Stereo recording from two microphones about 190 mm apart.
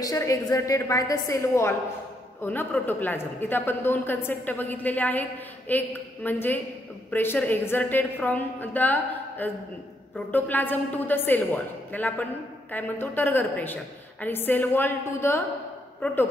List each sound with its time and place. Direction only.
0.0 s a man's voice: 15° left (ahead or behind)